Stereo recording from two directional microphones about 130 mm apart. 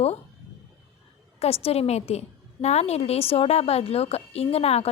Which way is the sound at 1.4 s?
50° left (ahead or behind).